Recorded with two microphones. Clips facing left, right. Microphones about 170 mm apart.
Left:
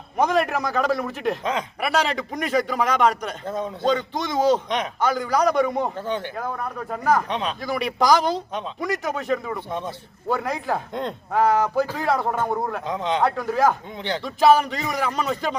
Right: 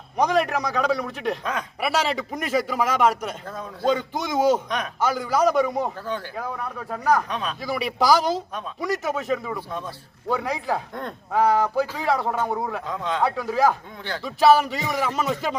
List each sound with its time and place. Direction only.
0.2 s a man's voice: centre (ahead or behind)
3.4 s speech: 20° left (ahead or behind)
3.8 s a man's voice: 5° right (ahead or behind)
6.0 s speech: 20° left (ahead or behind)
6.3 s a man's voice: centre (ahead or behind)
7.3 s speech: 25° left (ahead or behind)
7.6 s a man's voice: centre (ahead or behind)
9.6 s speech: 20° left (ahead or behind)
10.2 s a man's voice: centre (ahead or behind)
12.8 s speech: 20° left (ahead or behind)
13.2 s a man's voice: centre (ahead or behind)